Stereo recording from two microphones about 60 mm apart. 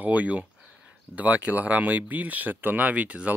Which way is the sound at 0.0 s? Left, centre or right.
Right.